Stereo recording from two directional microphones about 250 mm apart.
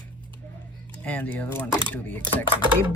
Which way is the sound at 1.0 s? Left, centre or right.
Centre.